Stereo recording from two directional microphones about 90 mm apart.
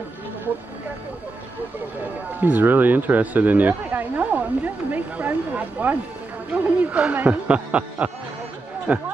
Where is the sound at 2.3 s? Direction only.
20° right (ahead or behind).